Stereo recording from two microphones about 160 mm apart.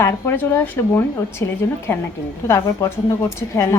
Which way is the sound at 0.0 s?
15° left (ahead or behind).